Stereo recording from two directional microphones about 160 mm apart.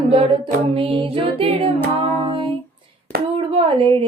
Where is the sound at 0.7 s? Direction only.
35° right (ahead or behind).